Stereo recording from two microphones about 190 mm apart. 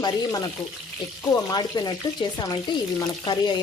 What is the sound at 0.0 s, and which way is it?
Speech, 20° left (ahead or behind).